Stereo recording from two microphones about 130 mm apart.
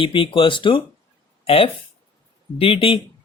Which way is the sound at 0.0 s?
45° left (ahead or behind).